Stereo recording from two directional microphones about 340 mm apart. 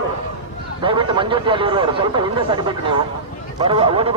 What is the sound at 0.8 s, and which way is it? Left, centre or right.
Speech, centre.